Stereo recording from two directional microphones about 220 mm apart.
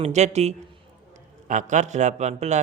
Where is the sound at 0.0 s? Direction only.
30° right (ahead or behind).